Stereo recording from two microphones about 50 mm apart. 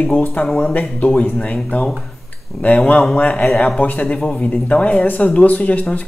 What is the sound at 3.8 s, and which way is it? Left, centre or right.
Speech, left.